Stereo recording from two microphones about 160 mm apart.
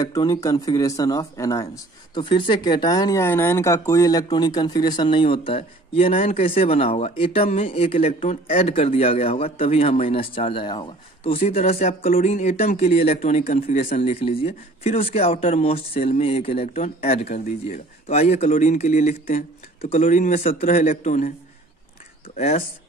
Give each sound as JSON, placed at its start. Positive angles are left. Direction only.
{"t": 0.0, "sound": "speech", "side_deg": 25}
{"t": 2.1, "sound": "a man's voice", "side_deg": 30}